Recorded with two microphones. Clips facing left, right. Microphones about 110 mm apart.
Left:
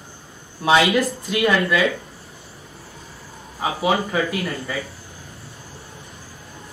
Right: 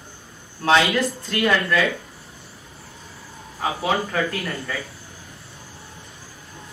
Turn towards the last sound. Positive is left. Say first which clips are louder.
# left 2 dB
turn(degrees=10)  # may be behind; listen again after turning